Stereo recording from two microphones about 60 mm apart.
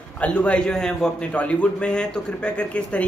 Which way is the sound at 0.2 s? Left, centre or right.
Left.